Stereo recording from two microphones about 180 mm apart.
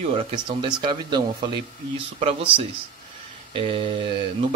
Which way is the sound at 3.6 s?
30° right (ahead or behind).